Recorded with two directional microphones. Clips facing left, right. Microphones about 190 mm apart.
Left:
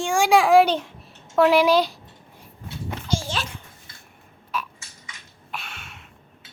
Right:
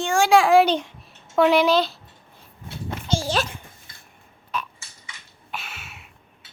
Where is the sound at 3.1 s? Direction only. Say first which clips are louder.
Right 4 dB; 35° right (ahead or behind).